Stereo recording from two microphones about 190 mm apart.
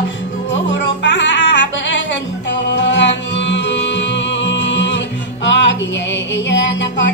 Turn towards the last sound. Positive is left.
turn(degrees=70)  # may be behind; listen again after turning